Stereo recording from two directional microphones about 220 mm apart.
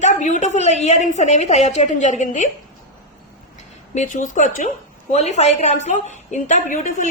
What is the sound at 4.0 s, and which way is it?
A woman's voice, 35° left (ahead or behind).